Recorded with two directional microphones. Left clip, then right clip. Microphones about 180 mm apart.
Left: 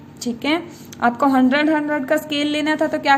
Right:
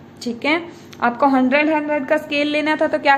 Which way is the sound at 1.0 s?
40° left (ahead or behind).